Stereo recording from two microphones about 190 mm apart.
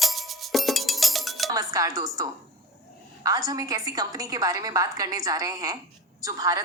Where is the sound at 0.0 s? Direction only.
Centre (ahead or behind).